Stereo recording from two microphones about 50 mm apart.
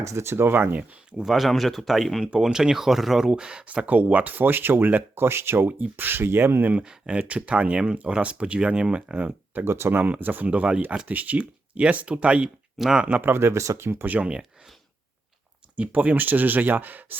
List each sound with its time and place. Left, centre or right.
0.0 s speech: right
1.1 s speech: centre
2.4 s speech: centre
3.8 s speech: right
5.1 s speech: right
6.8 s speech: centre
9.6 s speech: right
9.9 s speech: right
12.8 s speech: centre
13.2 s speech: right
14.0 s speech: right
15.7 s speech: right